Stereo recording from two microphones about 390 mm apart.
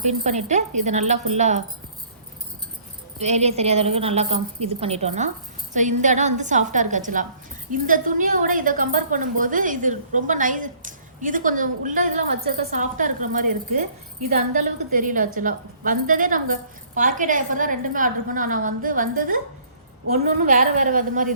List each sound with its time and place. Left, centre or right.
0.0 s speech: centre
3.2 s a woman's voice: centre
20.4 s a woman's voice: centre